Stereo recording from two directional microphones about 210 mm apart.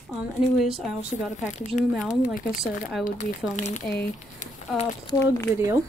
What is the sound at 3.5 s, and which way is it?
Speech, 35° left (ahead or behind).